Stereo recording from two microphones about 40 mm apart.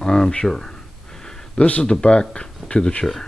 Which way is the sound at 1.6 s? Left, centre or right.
Left.